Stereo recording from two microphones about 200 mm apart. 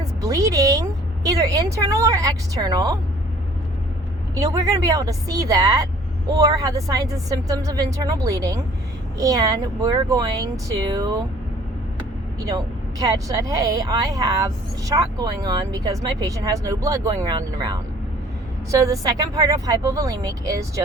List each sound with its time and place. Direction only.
0.2 s a woman's voice: 15° right (ahead or behind)
4.4 s speech: 15° right (ahead or behind)
12.4 s speech: 20° right (ahead or behind)